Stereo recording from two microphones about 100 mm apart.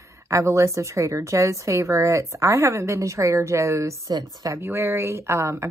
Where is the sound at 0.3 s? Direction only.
30° right (ahead or behind).